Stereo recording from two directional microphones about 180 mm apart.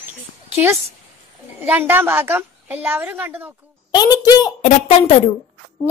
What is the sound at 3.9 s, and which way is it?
Speech, 20° left (ahead or behind).